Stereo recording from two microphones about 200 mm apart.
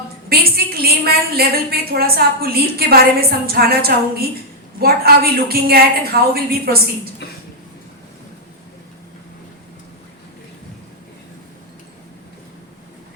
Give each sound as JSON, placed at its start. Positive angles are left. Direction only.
{"t": 0.3, "sound": "a woman's voice", "side_deg": -50}